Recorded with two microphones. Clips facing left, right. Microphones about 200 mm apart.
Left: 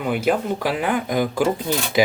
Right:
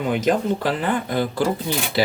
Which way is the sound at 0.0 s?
10° left (ahead or behind).